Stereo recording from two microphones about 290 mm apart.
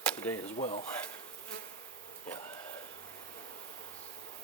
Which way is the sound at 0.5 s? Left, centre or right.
Left.